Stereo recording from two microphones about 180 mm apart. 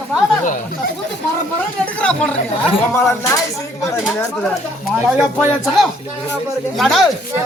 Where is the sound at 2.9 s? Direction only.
15° left (ahead or behind).